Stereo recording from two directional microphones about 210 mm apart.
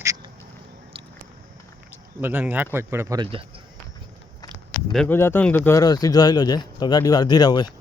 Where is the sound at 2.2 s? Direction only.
10° right (ahead or behind).